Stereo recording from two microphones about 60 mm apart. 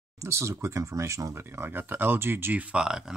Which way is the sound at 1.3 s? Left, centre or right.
Right.